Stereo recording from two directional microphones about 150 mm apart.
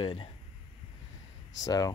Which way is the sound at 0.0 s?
35° left (ahead or behind).